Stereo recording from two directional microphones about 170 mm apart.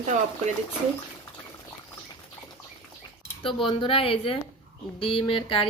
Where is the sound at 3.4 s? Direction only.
30° left (ahead or behind).